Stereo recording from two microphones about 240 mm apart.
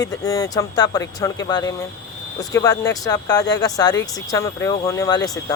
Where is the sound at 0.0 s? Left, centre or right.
Centre.